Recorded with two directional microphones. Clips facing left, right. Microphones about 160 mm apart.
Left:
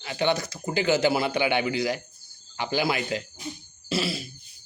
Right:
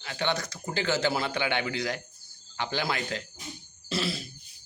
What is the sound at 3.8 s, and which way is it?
Fart, 5° left (ahead or behind).